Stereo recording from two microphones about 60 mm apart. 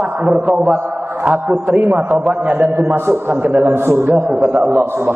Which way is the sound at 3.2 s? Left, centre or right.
Right.